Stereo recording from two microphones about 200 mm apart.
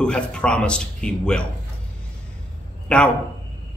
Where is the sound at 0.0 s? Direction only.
5° left (ahead or behind).